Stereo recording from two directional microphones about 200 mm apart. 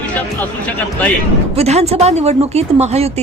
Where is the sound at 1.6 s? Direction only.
30° right (ahead or behind).